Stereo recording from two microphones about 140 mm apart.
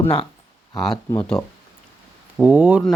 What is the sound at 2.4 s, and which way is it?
Speech, 10° right (ahead or behind).